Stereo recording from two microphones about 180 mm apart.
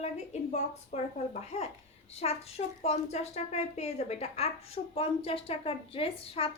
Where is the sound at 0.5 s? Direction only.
40° left (ahead or behind).